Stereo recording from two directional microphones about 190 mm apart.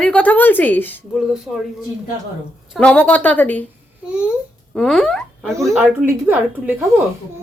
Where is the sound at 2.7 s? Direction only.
5° left (ahead or behind).